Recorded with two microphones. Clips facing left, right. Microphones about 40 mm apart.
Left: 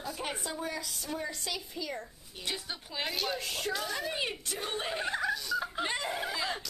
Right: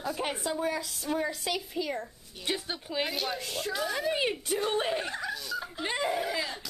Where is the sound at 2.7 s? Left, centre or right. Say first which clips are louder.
Right 5 dB; centre.